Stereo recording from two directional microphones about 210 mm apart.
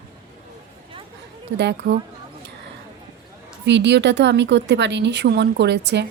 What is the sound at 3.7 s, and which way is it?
Speech, 55° right (ahead or behind).